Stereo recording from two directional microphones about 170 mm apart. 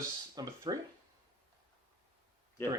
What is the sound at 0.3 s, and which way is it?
Speech, 25° right (ahead or behind).